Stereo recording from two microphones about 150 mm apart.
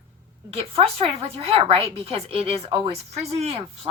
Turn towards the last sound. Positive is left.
turn(degrees=-40)  # may be behind; listen again after turning